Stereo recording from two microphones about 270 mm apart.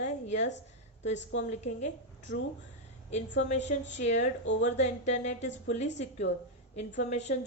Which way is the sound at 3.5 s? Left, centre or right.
Left.